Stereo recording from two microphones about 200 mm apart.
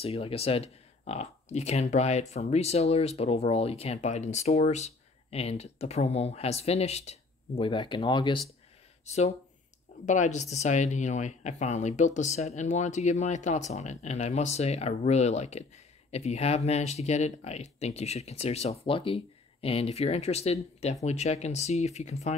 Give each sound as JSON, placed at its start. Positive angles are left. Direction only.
{"t": 0.0, "sound": "speech", "side_deg": 30}